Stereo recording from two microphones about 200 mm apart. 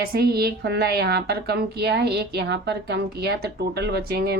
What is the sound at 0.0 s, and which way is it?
Speech, 50° right (ahead or behind).